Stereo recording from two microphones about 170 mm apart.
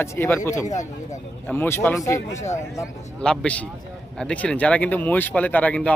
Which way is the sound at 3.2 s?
5° left (ahead or behind).